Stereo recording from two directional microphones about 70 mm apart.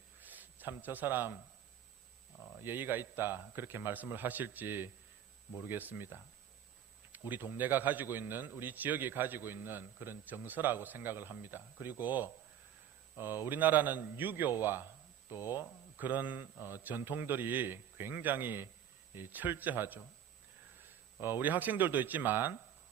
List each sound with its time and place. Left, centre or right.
0.2 s a sound: right
2.6 s a man's voice: right
21.2 s a man's voice: right